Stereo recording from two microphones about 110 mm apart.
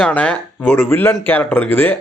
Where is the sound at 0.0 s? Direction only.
10° left (ahead or behind).